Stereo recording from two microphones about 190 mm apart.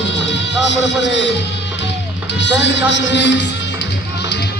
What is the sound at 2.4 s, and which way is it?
Speech, 70° left (ahead or behind).